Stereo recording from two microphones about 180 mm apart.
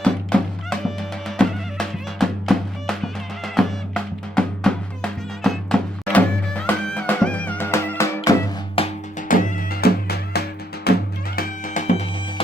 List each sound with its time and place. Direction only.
0.0 s music: 5° left (ahead or behind)
8.8 s music: 30° left (ahead or behind)
9.3 s music: 45° left (ahead or behind)
11.3 s music: 45° left (ahead or behind)